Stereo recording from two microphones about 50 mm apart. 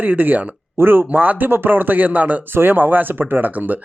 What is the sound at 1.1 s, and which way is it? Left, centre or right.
Speech, right.